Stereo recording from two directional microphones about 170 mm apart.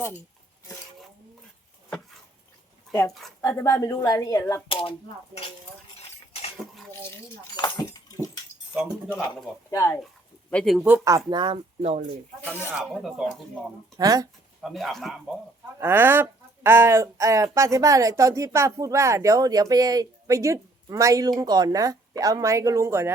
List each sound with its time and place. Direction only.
3.4 s speech: 15° left (ahead or behind)
4.7 s speech: 30° left (ahead or behind)
9.3 s speech: 15° left (ahead or behind)
10.5 s speech: centre (ahead or behind)
10.8 s speech: 15° right (ahead or behind)
11.3 s speech: 25° right (ahead or behind)
11.8 s speech: 45° right (ahead or behind)
12.4 s speech: 10° left (ahead or behind)
12.7 s speech: centre (ahead or behind)
14.0 s speech: 20° right (ahead or behind)
14.6 s speech: centre (ahead or behind)
15.8 s speech: 10° right (ahead or behind)